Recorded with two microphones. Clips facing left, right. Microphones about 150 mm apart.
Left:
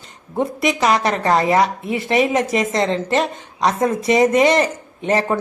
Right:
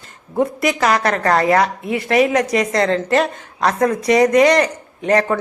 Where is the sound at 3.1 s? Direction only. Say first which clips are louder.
Right 2 dB; centre (ahead or behind).